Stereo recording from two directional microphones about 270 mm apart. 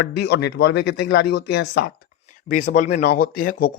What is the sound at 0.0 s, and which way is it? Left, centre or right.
Speech, left.